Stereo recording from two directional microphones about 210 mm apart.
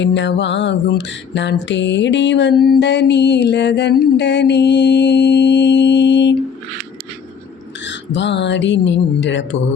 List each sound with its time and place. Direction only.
0.0 s mantra: 55° left (ahead or behind)
7.9 s mantra: 60° left (ahead or behind)